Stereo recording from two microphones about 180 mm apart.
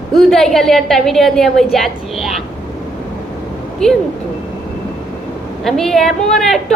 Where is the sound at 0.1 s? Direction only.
Centre (ahead or behind).